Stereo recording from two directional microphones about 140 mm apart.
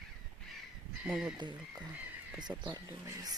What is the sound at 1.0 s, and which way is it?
Speech, 5° right (ahead or behind).